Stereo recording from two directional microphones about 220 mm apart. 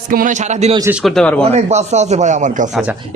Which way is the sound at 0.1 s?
35° right (ahead or behind).